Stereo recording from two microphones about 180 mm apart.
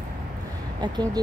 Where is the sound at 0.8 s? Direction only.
20° right (ahead or behind).